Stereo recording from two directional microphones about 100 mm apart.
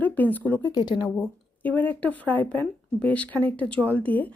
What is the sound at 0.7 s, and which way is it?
Speech, 45° left (ahead or behind).